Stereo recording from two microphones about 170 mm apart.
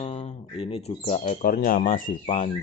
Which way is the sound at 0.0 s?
40° left (ahead or behind).